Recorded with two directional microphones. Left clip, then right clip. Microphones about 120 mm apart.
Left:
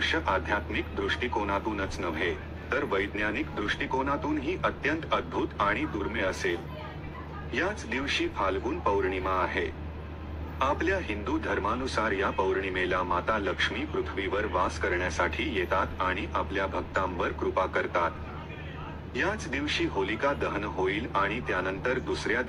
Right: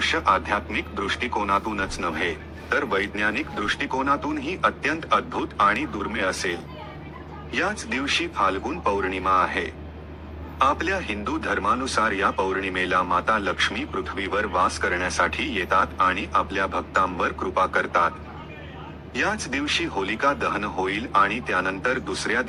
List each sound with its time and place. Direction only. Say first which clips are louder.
0.0 s speech: right 6 dB; 30° right (ahead or behind)
19.1 s speech: right 5 dB; 30° right (ahead or behind)